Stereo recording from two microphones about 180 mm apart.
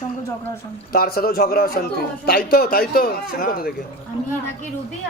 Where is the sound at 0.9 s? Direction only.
55° left (ahead or behind).